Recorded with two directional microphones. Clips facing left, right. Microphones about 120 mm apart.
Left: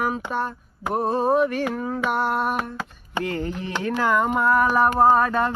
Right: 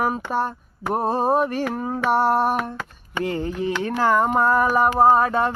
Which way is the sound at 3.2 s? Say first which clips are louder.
Right 3 dB; 25° right (ahead or behind).